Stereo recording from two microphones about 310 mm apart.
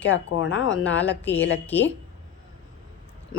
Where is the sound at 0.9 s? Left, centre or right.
Centre.